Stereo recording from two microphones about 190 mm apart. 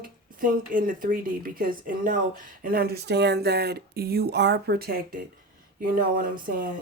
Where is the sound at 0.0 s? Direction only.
50° right (ahead or behind).